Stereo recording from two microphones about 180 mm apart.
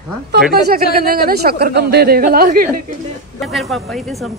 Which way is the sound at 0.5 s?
55° right (ahead or behind).